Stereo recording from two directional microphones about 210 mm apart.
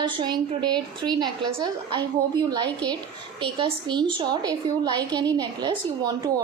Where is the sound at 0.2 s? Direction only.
20° right (ahead or behind).